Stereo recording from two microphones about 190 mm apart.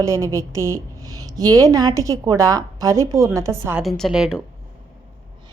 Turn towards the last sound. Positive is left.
turn(degrees=-5)  # may be behind; listen again after turning